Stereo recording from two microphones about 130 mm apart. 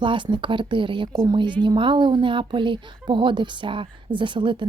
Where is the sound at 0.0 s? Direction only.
40° right (ahead or behind).